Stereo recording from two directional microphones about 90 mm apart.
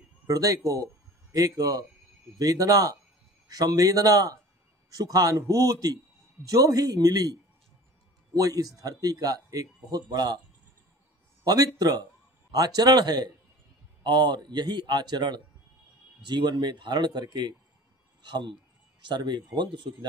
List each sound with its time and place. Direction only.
0.3 s a man's voice: 40° right (ahead or behind)
8.4 s speech: 45° right (ahead or behind)
11.4 s speech: 45° right (ahead or behind); by 20.1 s 60° right (ahead or behind)